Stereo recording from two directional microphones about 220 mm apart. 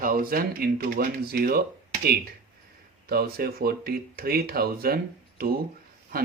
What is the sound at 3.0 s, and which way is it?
Speech, 45° right (ahead or behind).